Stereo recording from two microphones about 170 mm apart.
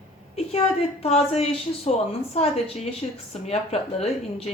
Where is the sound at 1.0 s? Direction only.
40° left (ahead or behind).